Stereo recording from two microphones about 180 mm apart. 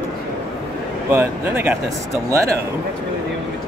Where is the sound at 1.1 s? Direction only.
10° right (ahead or behind).